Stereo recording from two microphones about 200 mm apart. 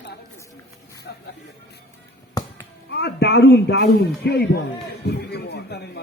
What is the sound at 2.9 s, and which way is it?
A man's voice, 55° left (ahead or behind).